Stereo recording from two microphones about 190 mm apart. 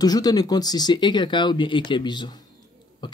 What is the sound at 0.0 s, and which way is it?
Speech, 20° left (ahead or behind).